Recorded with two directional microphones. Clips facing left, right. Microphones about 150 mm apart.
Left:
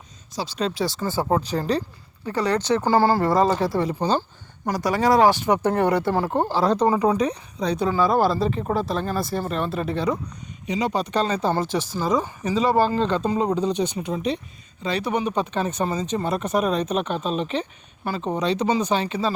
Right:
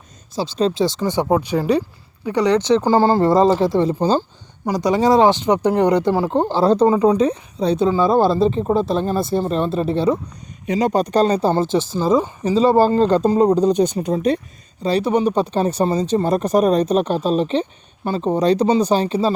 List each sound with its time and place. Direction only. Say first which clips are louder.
0.3 s speech: right 7 dB; 25° right (ahead or behind)
4.2 s speech: right 5 dB; 15° right (ahead or behind)
6.5 s speech: right 6 dB; 30° right (ahead or behind)
10.7 s speech: right 6 dB; 45° right (ahead or behind)